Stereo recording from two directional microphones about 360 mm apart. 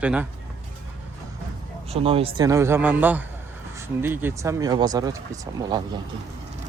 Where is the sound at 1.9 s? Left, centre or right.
Centre.